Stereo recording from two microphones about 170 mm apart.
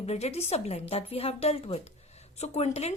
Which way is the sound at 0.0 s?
40° left (ahead or behind).